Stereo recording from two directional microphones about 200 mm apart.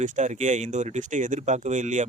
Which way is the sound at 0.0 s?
35° right (ahead or behind).